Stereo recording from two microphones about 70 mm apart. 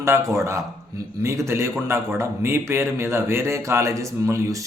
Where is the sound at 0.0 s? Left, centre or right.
Right.